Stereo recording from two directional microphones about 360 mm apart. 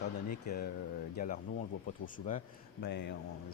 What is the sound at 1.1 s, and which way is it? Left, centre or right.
A man's voice, left.